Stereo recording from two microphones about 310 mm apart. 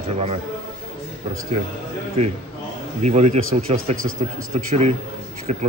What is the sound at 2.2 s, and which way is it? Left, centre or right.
Speech, centre.